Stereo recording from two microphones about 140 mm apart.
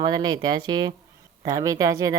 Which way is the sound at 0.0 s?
30° right (ahead or behind).